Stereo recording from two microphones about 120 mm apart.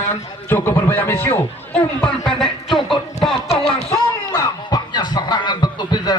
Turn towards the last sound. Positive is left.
turn(degrees=35)  # may be behind; listen again after turning